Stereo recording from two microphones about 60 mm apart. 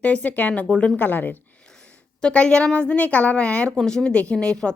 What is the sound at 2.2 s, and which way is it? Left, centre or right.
A woman's voice, centre.